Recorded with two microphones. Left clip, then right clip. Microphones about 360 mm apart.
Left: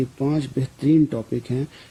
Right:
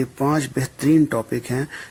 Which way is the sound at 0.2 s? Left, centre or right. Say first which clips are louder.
Right 5 dB; right.